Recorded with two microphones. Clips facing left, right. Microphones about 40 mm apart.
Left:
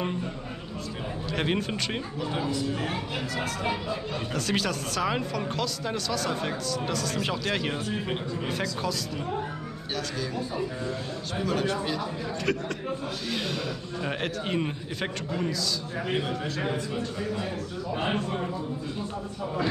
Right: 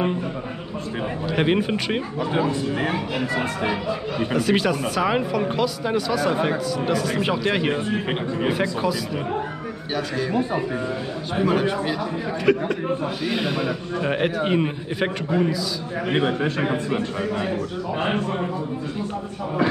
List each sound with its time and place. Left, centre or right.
1.3 s a man's voice: centre
2.4 s a man's voice: right
2.9 s speech: right
4.4 s a man's voice: centre; by 8.5 s right
8.5 s a man's voice: centre
11.4 s a man's voice: right
16.1 s a man's voice: right